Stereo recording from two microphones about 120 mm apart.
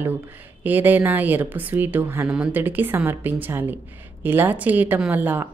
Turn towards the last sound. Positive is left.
turn(degrees=-15)  # may be behind; listen again after turning